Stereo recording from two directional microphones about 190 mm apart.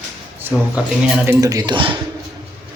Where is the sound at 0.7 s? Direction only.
5° right (ahead or behind).